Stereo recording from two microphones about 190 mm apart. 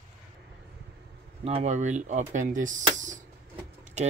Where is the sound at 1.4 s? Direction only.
35° right (ahead or behind).